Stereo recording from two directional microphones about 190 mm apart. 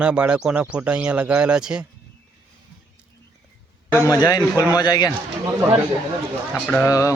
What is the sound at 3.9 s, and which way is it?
A man's voice, 15° left (ahead or behind).